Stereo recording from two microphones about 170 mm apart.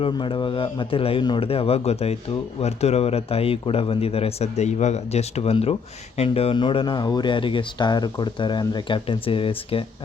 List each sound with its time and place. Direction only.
0.0 s speech: 30° left (ahead or behind)